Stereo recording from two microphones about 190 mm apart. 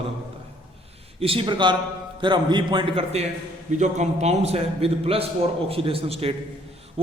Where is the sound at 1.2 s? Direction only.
30° right (ahead or behind).